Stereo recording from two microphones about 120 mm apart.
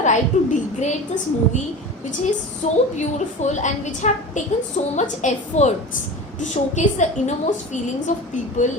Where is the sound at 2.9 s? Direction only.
80° left.